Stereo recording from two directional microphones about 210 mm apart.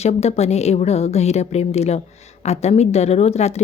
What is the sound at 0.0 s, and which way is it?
A woman's voice, 30° left (ahead or behind).